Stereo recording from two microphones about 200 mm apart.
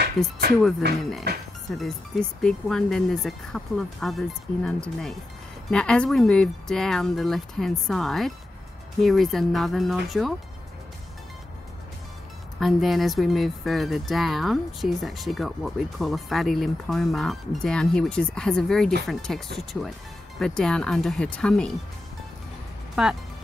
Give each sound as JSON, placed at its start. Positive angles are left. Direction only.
{"t": 0.6, "sound": "speech", "side_deg": 0}
{"t": 1.3, "sound": "music", "side_deg": -55}
{"t": 1.7, "sound": "speech", "side_deg": 0}
{"t": 12.5, "sound": "speech", "side_deg": 0}
{"t": 23.0, "sound": "speech", "side_deg": -5}